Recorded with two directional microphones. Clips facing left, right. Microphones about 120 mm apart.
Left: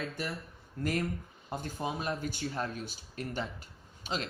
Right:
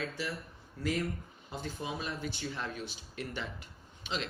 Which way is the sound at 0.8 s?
50° left (ahead or behind).